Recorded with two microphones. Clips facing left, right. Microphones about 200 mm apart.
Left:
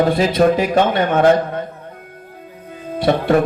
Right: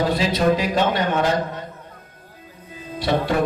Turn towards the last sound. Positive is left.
turn(degrees=55)  # may be behind; listen again after turning